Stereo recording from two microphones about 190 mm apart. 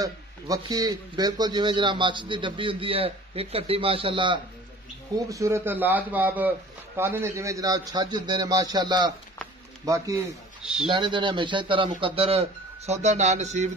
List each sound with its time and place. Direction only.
0.0 s a man's voice: 20° right (ahead or behind)
5.3 s a man's voice: 15° right (ahead or behind)
10.6 s a man's voice: 5° right (ahead or behind)
10.9 s a man's voice: 25° right (ahead or behind)